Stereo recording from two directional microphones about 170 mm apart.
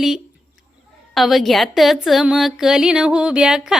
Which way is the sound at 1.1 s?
Centre (ahead or behind).